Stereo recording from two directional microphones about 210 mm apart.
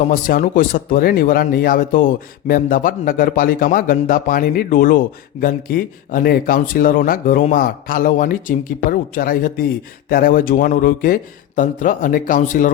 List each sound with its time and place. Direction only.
0.0 s speech: 40° left (ahead or behind)